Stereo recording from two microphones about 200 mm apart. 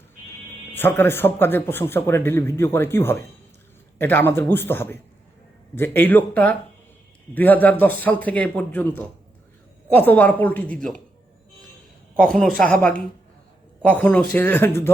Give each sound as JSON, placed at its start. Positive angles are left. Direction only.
{"t": 0.7, "sound": "a man's voice", "side_deg": 10}
{"t": 12.2, "sound": "a woman's voice", "side_deg": 0}